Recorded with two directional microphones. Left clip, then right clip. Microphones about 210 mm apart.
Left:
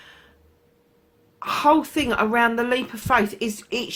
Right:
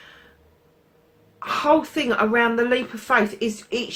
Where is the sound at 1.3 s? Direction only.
45° left (ahead or behind).